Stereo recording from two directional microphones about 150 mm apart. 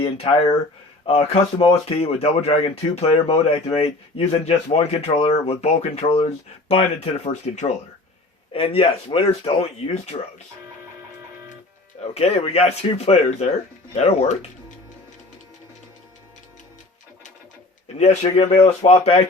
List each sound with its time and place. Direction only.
0.0 s speech: 35° left (ahead or behind)
8.5 s speech: 40° left (ahead or behind)
11.9 s speech: 45° left (ahead or behind)
17.9 s speech: 45° left (ahead or behind)